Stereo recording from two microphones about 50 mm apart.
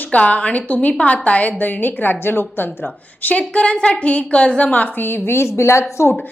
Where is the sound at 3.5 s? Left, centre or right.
Left.